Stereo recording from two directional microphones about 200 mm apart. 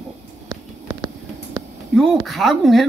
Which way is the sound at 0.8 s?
20° right (ahead or behind).